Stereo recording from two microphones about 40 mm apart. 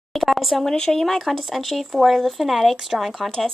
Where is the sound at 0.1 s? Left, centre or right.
Centre.